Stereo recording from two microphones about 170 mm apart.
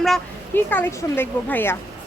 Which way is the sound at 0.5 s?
10° left (ahead or behind).